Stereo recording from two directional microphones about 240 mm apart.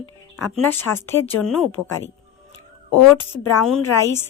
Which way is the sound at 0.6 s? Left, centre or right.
Centre.